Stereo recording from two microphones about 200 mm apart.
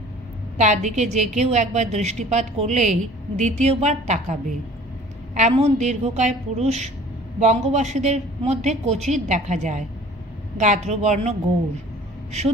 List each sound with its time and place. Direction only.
0.6 s a woman's voice: 35° right (ahead or behind)